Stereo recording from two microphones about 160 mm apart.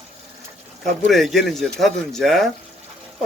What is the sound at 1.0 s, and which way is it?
Speech, centre (ahead or behind).